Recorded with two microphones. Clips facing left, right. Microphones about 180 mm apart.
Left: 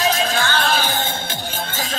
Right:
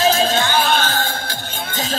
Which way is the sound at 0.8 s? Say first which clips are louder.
Right 1 dB; 15° left (ahead or behind).